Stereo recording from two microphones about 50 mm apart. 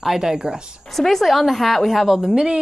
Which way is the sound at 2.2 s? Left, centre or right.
Centre.